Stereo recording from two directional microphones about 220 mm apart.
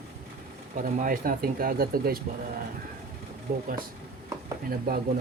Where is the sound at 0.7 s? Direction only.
40° right (ahead or behind).